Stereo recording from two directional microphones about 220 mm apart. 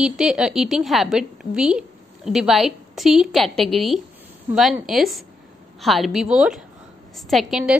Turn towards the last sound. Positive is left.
turn(degrees=0)  # may be behind; listen again after turning